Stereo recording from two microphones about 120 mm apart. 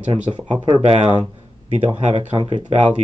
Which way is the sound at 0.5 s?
40° right (ahead or behind).